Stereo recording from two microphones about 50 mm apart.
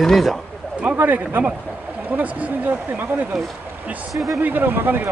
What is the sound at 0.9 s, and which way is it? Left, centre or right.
Speech, right.